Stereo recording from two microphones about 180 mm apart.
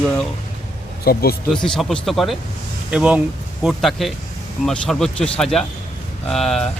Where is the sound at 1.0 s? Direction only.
60° left (ahead or behind).